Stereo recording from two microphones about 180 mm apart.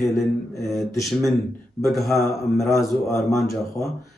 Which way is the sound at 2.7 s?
15° left (ahead or behind).